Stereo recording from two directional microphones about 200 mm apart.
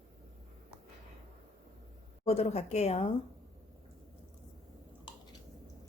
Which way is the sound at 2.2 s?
30° left (ahead or behind).